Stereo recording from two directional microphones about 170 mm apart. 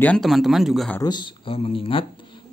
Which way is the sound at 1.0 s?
25° left (ahead or behind).